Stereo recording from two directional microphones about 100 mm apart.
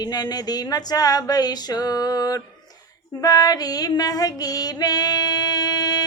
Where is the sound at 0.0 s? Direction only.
40° left (ahead or behind).